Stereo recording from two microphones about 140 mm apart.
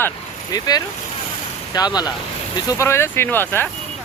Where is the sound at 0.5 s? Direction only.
30° left (ahead or behind).